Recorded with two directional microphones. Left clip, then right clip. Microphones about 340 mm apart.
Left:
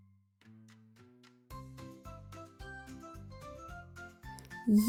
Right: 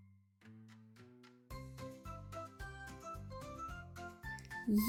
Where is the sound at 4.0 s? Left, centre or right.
Centre.